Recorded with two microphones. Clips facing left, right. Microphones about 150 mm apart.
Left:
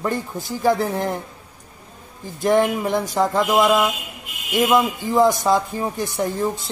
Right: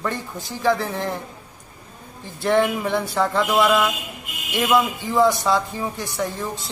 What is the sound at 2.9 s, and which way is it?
Speech, 40° left (ahead or behind).